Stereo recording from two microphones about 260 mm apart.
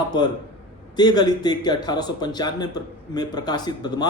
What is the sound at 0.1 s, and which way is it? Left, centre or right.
Speech, centre.